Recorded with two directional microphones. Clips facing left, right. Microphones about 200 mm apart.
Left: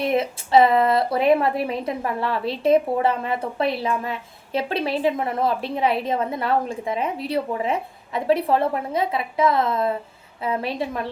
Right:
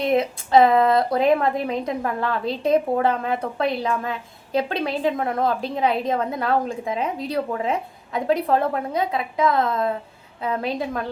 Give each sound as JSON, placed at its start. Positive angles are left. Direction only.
{"t": 0.0, "sound": "a woman's voice", "side_deg": 5}